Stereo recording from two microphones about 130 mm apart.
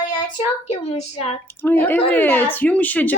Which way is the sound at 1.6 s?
15° left (ahead or behind).